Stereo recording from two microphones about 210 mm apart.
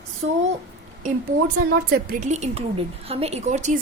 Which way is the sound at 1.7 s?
45° right (ahead or behind).